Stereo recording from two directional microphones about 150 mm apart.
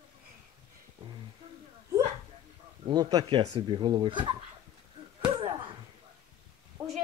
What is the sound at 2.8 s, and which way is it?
Speech, 25° right (ahead or behind).